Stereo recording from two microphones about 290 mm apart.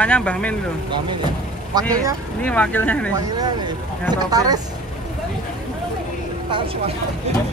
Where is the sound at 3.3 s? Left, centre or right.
Centre.